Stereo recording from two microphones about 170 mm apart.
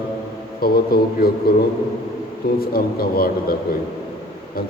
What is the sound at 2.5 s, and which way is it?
A man's voice, 65° left (ahead or behind).